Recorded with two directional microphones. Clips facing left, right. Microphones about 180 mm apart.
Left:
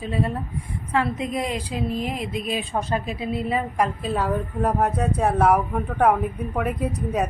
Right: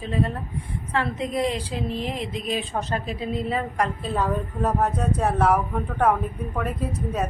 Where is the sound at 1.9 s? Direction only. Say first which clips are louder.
Left 2 dB; 10° left (ahead or behind).